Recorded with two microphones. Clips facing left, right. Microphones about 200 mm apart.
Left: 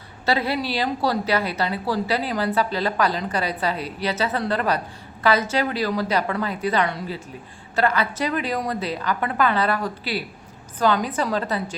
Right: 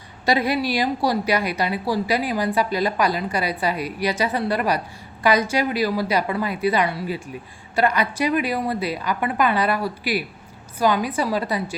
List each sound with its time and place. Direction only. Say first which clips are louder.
0.3 s a woman's voice: right 2 dB; 15° right (ahead or behind)